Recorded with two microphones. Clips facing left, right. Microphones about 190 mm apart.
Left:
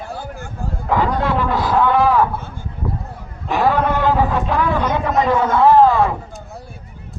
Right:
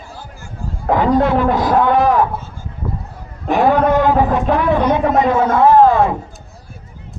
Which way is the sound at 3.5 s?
20° right (ahead or behind).